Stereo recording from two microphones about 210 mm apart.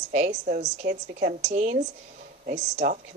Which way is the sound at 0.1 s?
35° right (ahead or behind).